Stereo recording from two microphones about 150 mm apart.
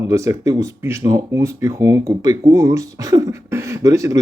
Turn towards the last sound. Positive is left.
turn(degrees=-20)  # may be behind; listen again after turning